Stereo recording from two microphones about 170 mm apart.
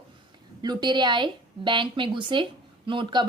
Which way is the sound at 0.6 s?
25° right (ahead or behind).